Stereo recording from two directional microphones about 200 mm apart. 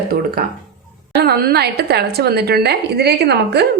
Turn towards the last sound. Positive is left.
turn(degrees=-55)  # may be behind; listen again after turning